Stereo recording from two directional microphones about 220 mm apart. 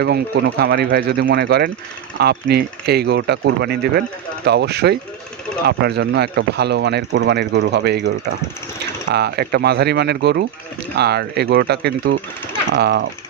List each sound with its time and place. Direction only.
0.6 s speech: 50° right (ahead or behind)